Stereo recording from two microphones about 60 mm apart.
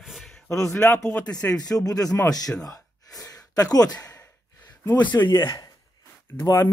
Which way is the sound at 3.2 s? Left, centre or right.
Left.